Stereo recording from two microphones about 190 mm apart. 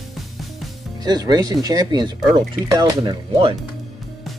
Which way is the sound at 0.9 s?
20° right (ahead or behind).